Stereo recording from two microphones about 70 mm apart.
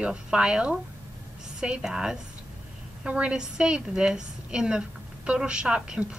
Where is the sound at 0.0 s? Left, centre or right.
Centre.